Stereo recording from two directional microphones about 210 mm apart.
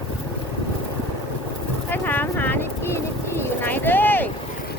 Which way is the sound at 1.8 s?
10° left (ahead or behind).